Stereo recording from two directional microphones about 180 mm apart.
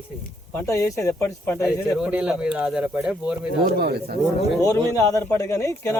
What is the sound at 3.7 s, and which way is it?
Speech, 60° right (ahead or behind).